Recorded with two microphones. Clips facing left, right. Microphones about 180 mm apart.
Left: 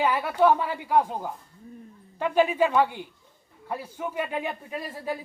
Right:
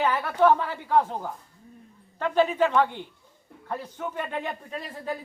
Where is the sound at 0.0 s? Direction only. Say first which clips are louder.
Even; 10° left (ahead or behind).